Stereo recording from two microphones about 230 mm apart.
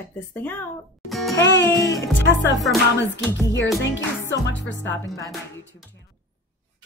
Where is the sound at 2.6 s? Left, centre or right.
Centre.